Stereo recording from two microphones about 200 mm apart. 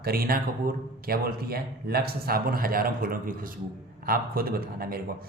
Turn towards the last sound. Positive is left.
turn(degrees=-50)  # may be behind; listen again after turning